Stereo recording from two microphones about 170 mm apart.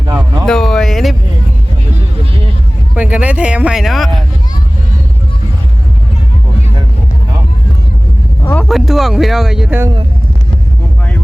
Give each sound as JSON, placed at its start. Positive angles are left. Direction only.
{"t": 0.4, "sound": "speech", "side_deg": 5}
{"t": 2.9, "sound": "speech", "side_deg": -10}
{"t": 8.4, "sound": "speech", "side_deg": 5}